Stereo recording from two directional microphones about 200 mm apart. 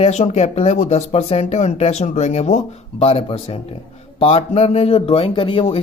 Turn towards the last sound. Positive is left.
turn(degrees=30)  # may be behind; listen again after turning